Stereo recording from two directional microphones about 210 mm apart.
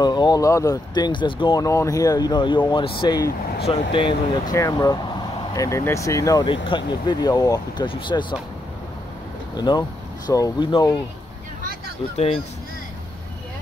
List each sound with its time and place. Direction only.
0.0 s speech: 20° left (ahead or behind)
9.6 s speech: 20° left (ahead or behind)